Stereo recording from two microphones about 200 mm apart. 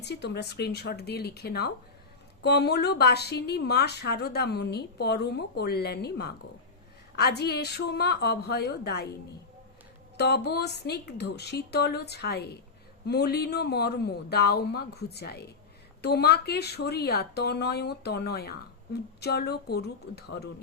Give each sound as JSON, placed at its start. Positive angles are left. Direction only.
{"t": 0.0, "sound": "a woman's voice", "side_deg": 60}
{"t": 10.2, "sound": "a woman's voice", "side_deg": 55}